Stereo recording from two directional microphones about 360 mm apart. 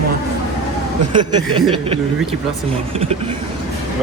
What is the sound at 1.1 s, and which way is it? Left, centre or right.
Speech, centre.